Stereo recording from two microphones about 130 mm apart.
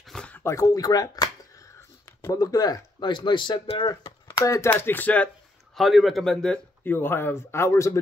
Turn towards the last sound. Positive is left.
turn(degrees=20)  # may be behind; listen again after turning